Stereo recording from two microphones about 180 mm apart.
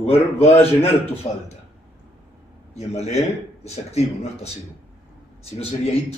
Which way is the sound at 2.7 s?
35° left (ahead or behind).